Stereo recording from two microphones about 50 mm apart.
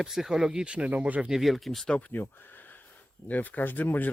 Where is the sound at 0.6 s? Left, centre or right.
Right.